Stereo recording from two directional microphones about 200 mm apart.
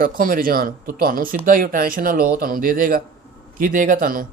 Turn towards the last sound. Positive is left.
turn(degrees=-45)  # may be behind; listen again after turning